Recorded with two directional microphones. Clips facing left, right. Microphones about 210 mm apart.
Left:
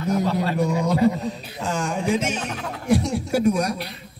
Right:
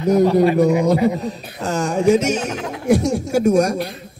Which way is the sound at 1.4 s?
40° right (ahead or behind).